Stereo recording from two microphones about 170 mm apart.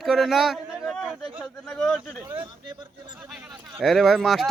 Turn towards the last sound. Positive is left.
turn(degrees=0)  # may be behind; listen again after turning